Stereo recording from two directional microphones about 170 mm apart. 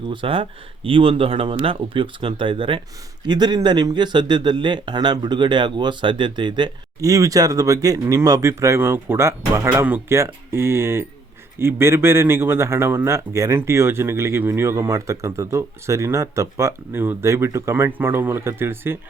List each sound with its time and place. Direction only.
0.1 s speech: 30° right (ahead or behind); by 18.9 s 15° right (ahead or behind)